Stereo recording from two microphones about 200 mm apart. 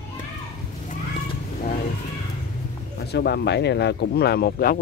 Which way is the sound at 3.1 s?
55° left (ahead or behind).